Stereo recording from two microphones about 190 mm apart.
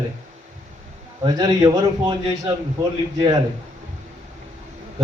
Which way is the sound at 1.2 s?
20° right (ahead or behind).